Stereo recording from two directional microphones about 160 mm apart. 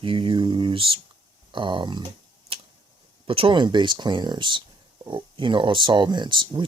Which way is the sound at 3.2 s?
35° right (ahead or behind).